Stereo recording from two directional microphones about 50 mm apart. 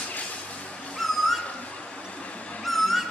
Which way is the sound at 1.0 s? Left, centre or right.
Centre.